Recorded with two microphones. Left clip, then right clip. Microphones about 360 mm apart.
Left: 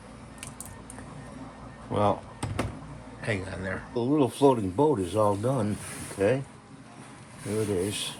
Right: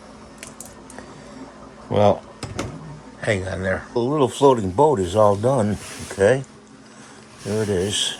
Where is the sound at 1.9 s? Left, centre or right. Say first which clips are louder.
Right 9 dB; right.